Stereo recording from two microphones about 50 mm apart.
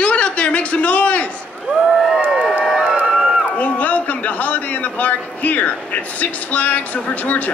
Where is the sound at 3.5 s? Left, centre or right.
Left.